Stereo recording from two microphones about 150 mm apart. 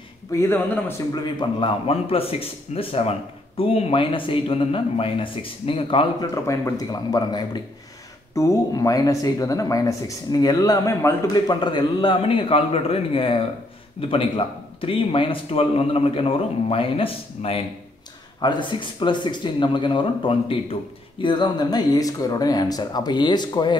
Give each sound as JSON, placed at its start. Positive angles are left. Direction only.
{"t": 0.3, "sound": "speech", "side_deg": 15}
{"t": 1.1, "sound": "a man's voice", "side_deg": 30}
{"t": 6.3, "sound": "speech", "side_deg": 20}
{"t": 11.4, "sound": "a man's voice", "side_deg": 30}